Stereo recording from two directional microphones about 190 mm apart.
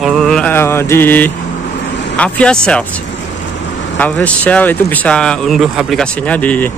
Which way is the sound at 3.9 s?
10° left (ahead or behind).